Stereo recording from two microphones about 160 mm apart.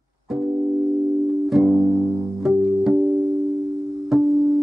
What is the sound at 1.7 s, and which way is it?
Music, 15° right (ahead or behind).